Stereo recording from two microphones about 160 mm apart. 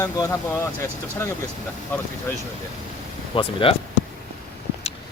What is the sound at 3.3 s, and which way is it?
Speech, 30° left (ahead or behind).